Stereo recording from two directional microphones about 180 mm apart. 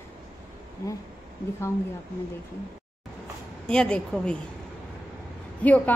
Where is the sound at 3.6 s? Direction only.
5° left (ahead or behind).